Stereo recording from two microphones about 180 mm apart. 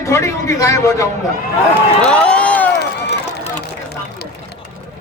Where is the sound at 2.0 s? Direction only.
5° left (ahead or behind).